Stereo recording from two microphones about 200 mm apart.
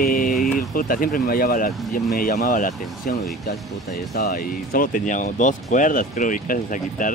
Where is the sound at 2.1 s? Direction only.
45° left (ahead or behind).